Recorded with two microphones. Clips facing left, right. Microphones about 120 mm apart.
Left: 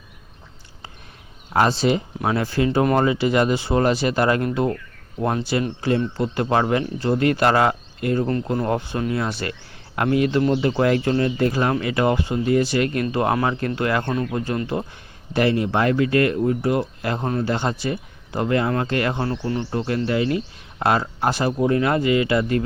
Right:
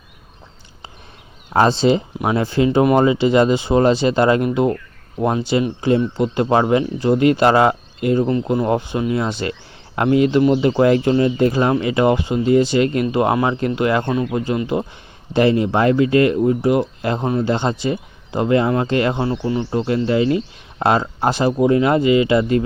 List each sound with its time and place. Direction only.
1.5 s speech: 25° right (ahead or behind)